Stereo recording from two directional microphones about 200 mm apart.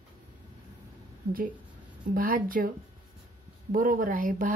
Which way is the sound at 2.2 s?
45° right (ahead or behind).